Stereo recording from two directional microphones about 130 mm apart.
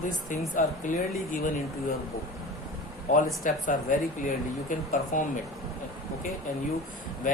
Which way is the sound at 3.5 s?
90° left.